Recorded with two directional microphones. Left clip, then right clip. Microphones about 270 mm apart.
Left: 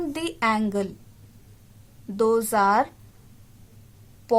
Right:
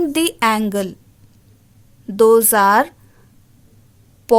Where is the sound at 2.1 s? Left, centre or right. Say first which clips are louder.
Right 9 dB; right.